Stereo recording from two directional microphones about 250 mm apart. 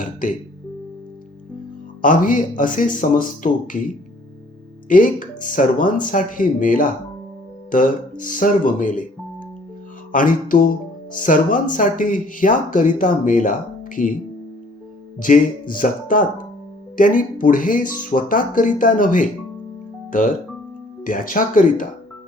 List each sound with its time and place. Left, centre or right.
0.0 s speech: left
2.0 s speech: left
4.9 s speech: left
10.1 s speech: left
15.2 s speech: left